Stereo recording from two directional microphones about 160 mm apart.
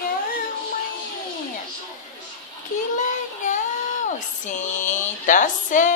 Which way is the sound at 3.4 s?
50° left (ahead or behind).